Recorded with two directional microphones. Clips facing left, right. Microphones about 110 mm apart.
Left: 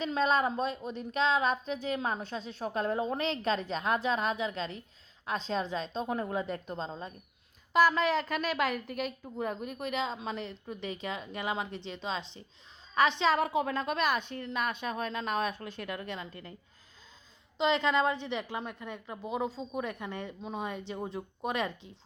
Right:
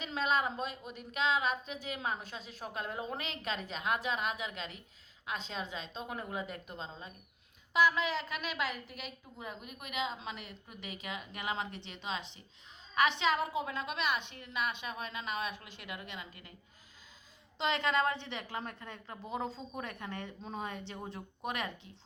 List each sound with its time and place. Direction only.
0.0 s a woman's voice: 35° left (ahead or behind)
13.1 s a woman's voice: 30° left (ahead or behind)
13.4 s a woman's voice: 65° left (ahead or behind)
13.7 s a woman's voice: 45° left (ahead or behind)
17.6 s a woman's voice: 20° left (ahead or behind)